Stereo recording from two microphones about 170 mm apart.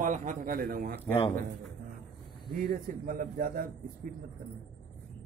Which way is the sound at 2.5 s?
60° right (ahead or behind).